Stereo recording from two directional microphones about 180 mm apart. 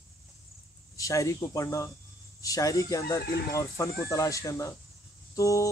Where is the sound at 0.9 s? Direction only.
20° left (ahead or behind).